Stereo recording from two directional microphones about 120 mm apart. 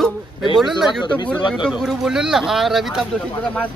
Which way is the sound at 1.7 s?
Centre (ahead or behind).